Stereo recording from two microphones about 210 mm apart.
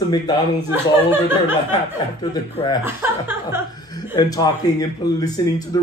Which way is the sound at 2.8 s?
10° right (ahead or behind).